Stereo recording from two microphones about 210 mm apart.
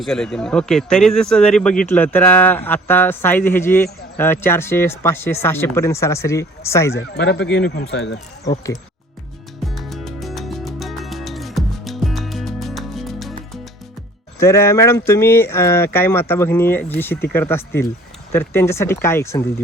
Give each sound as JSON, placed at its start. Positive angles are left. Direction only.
{"t": 0.0, "sound": "speech", "side_deg": 0}
{"t": 7.1, "sound": "a man's voice", "side_deg": 50}
{"t": 8.4, "sound": "speech", "side_deg": 15}
{"t": 9.7, "sound": "music", "side_deg": 0}
{"t": 14.3, "sound": "speech", "side_deg": 15}